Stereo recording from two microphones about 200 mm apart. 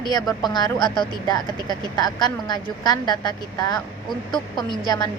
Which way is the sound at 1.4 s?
20° right (ahead or behind).